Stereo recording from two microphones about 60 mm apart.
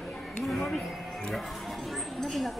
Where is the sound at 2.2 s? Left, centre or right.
Centre.